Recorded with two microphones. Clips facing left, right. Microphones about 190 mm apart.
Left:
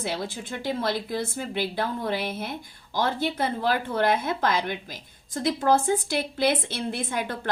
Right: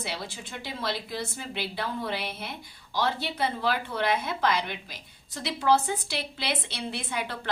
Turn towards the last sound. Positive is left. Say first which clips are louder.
# left 4 dB
turn(degrees=50)  # may be behind; listen again after turning